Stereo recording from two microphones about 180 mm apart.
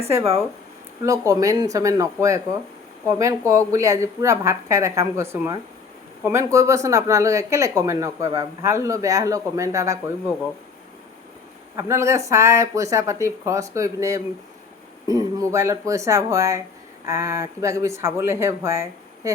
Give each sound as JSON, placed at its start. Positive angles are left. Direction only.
{"t": 0.1, "sound": "speech", "side_deg": -15}
{"t": 3.1, "sound": "speech", "side_deg": -15}
{"t": 11.8, "sound": "speech", "side_deg": -15}